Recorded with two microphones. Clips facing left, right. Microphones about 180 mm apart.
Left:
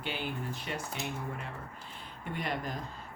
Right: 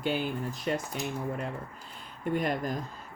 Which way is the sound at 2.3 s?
45° right (ahead or behind).